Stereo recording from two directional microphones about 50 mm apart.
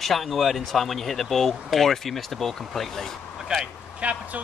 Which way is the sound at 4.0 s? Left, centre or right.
Right.